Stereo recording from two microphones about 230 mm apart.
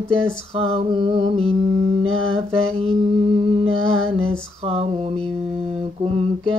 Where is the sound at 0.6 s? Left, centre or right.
Right.